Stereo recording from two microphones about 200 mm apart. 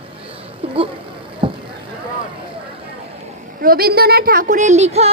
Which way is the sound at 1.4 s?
25° right (ahead or behind).